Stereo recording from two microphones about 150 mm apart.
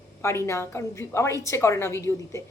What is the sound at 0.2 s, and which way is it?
A woman's voice, 15° left (ahead or behind).